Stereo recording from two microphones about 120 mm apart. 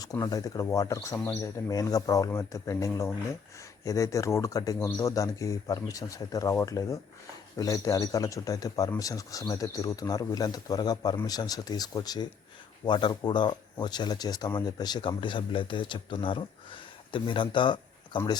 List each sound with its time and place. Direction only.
0.0 s speech: 30° left (ahead or behind)
1.1 s speech: 15° left (ahead or behind); by 18.2 s 40° left (ahead or behind)